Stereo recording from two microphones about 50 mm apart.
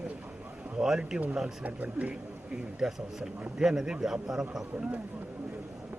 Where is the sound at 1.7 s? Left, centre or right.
Right.